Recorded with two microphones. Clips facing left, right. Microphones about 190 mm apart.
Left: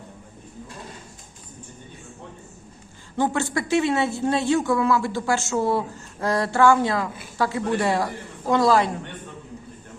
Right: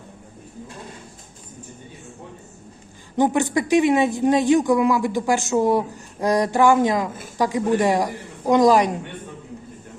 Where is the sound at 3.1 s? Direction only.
15° right (ahead or behind).